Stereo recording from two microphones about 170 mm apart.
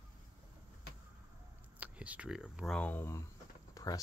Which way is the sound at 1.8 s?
10° right (ahead or behind).